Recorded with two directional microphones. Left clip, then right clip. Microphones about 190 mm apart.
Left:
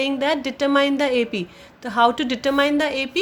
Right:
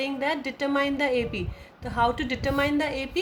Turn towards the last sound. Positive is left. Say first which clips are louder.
# left 6 dB
turn(degrees=35)  # may be behind; listen again after turning